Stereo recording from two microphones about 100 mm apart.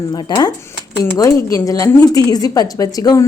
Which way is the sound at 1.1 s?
35° left (ahead or behind).